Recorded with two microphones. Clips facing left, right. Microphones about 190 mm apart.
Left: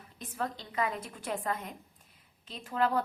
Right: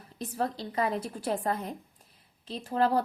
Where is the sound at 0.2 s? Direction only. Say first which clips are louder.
Right 5 dB; 35° right (ahead or behind).